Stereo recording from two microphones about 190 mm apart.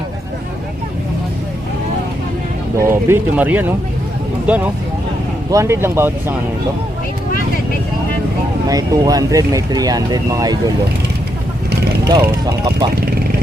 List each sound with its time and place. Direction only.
2.8 s speech: 15° right (ahead or behind)
8.6 s speech: 20° right (ahead or behind)
12.0 s speech: 20° right (ahead or behind)